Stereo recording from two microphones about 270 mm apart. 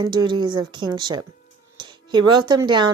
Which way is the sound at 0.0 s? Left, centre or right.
Centre.